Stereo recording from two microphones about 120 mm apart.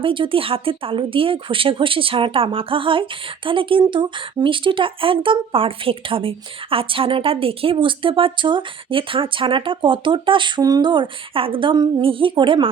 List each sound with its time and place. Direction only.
0.0 s speech: 45° right (ahead or behind)